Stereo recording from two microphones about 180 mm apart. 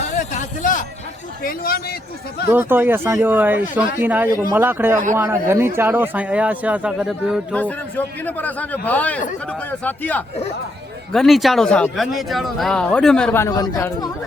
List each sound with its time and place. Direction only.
0.3 s a man's voice: 45° left (ahead or behind)
2.5 s speech: 10° right (ahead or behind)
7.5 s a man's voice: 10° left (ahead or behind)
13.4 s speech: 20° left (ahead or behind)